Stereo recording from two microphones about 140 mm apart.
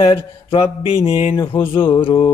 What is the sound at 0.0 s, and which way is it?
Mantra, 40° left (ahead or behind).